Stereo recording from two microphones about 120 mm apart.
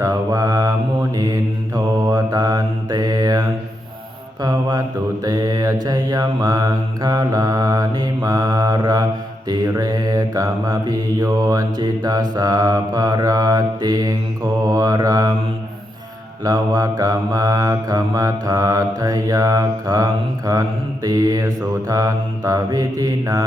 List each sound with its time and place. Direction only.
0.0 s mantra: 25° right (ahead or behind)
16.4 s mantra: 30° right (ahead or behind)